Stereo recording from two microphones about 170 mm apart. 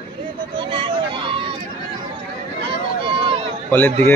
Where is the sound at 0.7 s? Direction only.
30° right (ahead or behind).